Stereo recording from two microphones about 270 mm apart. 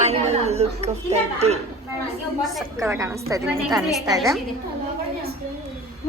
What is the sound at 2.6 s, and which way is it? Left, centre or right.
A woman's voice, centre.